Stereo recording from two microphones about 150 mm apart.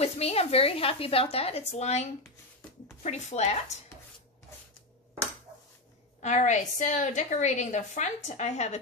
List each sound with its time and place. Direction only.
0.0 s a woman's voice: 45° left (ahead or behind)
6.2 s a woman's voice: 50° left (ahead or behind)